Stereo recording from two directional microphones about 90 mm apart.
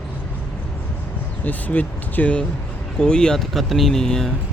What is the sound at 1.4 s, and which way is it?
Speech, 20° left (ahead or behind).